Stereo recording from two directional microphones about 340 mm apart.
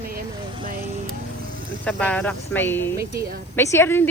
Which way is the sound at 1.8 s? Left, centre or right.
Centre.